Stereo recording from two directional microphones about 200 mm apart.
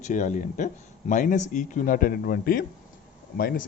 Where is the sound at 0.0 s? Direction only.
40° left (ahead or behind).